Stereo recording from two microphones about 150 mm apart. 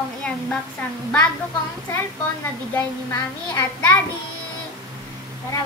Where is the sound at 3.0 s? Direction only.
20° left (ahead or behind).